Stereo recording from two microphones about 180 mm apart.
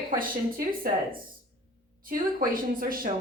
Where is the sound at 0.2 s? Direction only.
50° right (ahead or behind).